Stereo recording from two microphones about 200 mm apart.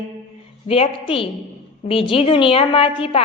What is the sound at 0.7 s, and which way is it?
A woman's voice, 30° left (ahead or behind).